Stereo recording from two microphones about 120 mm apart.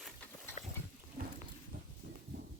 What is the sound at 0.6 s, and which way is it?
Wild animals, 65° left (ahead or behind).